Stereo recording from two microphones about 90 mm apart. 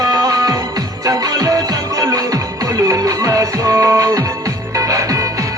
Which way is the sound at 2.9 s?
40° right (ahead or behind).